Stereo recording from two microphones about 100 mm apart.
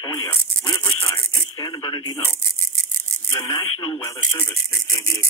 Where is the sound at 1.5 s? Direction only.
30° left (ahead or behind).